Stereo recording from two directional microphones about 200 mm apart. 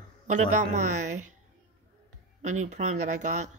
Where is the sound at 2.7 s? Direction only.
35° right (ahead or behind).